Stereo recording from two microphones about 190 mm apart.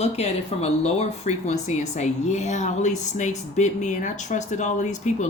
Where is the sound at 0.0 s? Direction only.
35° left (ahead or behind).